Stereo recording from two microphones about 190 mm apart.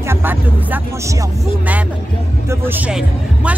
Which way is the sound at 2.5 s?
10° right (ahead or behind).